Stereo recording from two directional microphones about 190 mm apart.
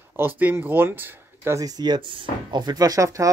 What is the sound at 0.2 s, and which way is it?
Speech, 10° right (ahead or behind).